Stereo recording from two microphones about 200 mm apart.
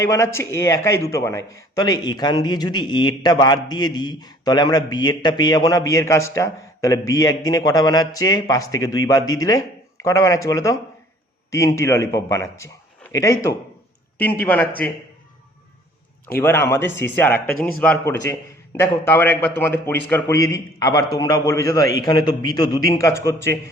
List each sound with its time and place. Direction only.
0.0 s a man's voice: 15° left (ahead or behind)
16.3 s a man's voice: 10° left (ahead or behind)